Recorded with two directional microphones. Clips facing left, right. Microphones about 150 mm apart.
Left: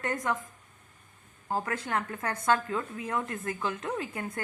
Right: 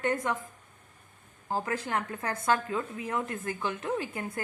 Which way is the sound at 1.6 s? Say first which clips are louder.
Even; 25° right (ahead or behind).